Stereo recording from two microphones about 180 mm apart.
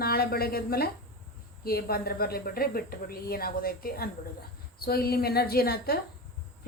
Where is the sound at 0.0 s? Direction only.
60° left (ahead or behind).